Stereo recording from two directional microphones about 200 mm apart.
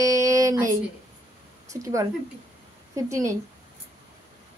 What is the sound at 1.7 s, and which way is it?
Speech, 15° right (ahead or behind).